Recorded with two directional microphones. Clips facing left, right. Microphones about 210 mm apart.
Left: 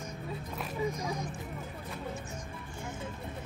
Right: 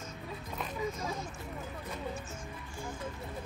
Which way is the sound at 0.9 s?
15° left (ahead or behind).